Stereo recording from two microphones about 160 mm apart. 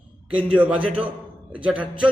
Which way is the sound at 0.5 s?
10° right (ahead or behind).